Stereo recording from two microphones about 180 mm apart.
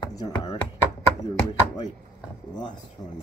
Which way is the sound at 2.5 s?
25° left (ahead or behind).